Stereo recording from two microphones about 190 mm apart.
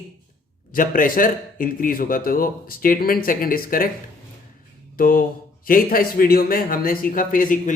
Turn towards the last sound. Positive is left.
turn(degrees=45)  # may be behind; listen again after turning